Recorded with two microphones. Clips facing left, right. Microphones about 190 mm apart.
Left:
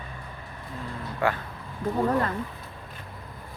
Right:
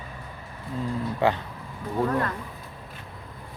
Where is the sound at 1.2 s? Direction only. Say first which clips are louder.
Right 3 dB; 25° right (ahead or behind).